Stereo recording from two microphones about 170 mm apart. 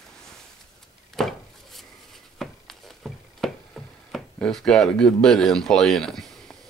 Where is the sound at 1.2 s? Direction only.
Centre (ahead or behind).